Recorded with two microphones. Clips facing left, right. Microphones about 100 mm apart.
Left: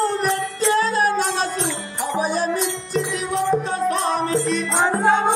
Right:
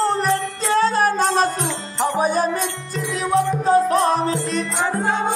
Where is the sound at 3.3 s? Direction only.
35° right (ahead or behind).